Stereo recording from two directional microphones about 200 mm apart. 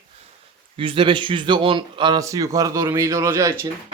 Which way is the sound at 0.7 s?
25° right (ahead or behind).